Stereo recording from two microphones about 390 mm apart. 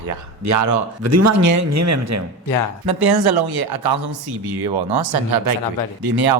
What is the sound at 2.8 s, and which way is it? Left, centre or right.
Speech, right.